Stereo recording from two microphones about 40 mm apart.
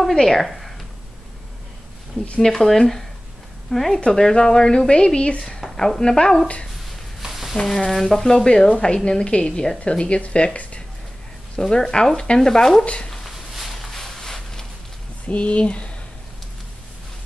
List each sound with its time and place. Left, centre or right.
0.1 s speech: centre
2.4 s speech: centre
4.1 s a woman's voice: centre
5.6 s a woman's voice: centre
7.2 s a sound: centre
7.5 s a woman's voice: centre; by 10.6 s left
11.7 s speech: centre
12.8 s a woman's voice: left
13.6 s a sound: centre
13.9 s a sound: centre
15.2 s speech: left